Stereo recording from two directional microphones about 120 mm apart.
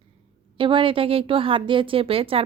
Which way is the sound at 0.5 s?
45° right (ahead or behind).